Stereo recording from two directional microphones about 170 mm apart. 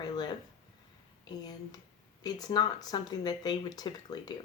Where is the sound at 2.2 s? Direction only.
25° left (ahead or behind).